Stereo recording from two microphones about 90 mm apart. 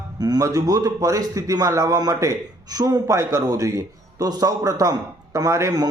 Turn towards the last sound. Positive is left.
turn(degrees=-35)  # may be behind; listen again after turning